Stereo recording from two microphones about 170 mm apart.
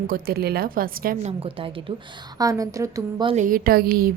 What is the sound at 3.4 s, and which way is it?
Speech, 55° right (ahead or behind).